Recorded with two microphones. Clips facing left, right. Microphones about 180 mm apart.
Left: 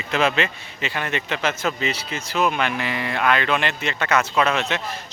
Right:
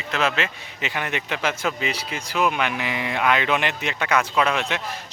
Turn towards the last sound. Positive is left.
turn(degrees=-10)  # may be behind; listen again after turning